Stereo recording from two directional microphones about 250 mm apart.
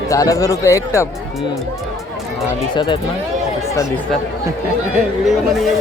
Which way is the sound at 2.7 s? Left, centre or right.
Centre.